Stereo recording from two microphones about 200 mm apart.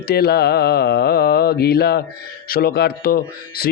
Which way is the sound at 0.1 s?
55° left (ahead or behind).